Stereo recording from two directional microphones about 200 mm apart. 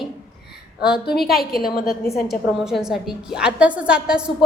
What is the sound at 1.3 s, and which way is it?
Speech, 50° left (ahead or behind).